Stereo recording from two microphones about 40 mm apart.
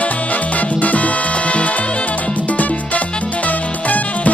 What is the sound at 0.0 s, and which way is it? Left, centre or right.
Music, left.